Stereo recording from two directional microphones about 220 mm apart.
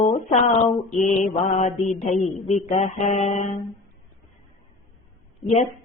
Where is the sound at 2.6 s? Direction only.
30° left (ahead or behind).